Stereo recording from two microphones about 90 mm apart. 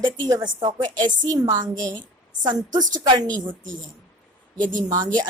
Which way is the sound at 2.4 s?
50° right (ahead or behind).